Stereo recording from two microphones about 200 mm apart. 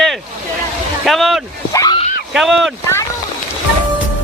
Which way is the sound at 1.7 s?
15° left (ahead or behind).